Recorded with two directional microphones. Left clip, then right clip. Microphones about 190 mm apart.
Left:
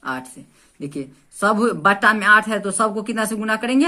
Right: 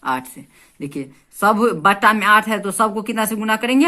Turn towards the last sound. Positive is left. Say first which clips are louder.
# right 2 dB
turn(degrees=-25)  # may be behind; listen again after turning